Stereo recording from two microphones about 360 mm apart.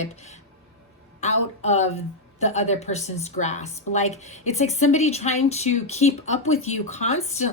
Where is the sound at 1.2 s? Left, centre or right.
Centre.